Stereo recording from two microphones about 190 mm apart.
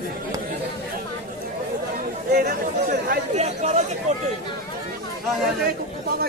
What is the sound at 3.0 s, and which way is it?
Chatter, 35° right (ahead or behind).